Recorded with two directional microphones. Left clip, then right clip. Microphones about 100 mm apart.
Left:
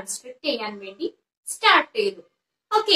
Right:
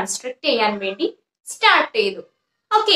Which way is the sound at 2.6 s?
30° right (ahead or behind).